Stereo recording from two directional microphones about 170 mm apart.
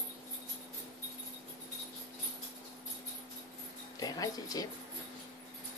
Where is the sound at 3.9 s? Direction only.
20° left (ahead or behind).